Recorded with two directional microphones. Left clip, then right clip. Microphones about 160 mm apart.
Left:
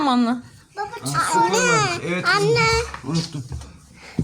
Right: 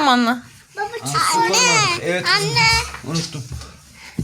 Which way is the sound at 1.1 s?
55° left (ahead or behind).